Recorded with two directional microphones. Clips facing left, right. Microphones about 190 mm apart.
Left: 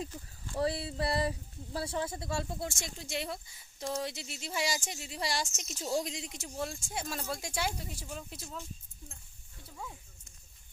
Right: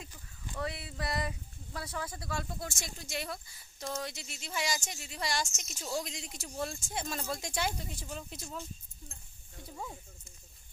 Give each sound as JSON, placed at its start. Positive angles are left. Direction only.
{"t": 0.5, "sound": "speech", "side_deg": 30}
{"t": 6.6, "sound": "speech", "side_deg": 10}